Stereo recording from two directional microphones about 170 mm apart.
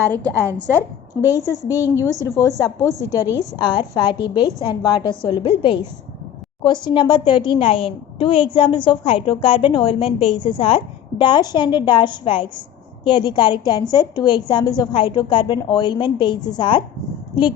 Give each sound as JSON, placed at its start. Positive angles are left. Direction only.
{"t": 0.3, "sound": "a woman's voice", "side_deg": -15}
{"t": 2.2, "sound": "a woman's voice", "side_deg": 15}
{"t": 2.9, "sound": "a woman's voice", "side_deg": -20}
{"t": 3.6, "sound": "a woman's voice", "side_deg": 25}